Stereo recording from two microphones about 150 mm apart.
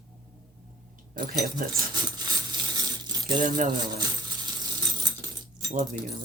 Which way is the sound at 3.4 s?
65° right (ahead or behind).